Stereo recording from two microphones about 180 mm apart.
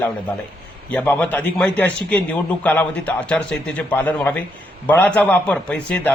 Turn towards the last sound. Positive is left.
turn(degrees=5)  # may be behind; listen again after turning